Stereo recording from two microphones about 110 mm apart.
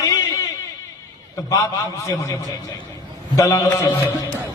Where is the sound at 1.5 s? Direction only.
30° left (ahead or behind).